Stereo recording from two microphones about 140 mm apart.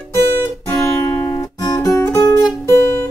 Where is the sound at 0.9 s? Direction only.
20° left (ahead or behind).